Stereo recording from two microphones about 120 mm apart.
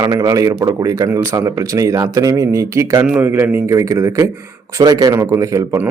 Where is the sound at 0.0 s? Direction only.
30° right (ahead or behind).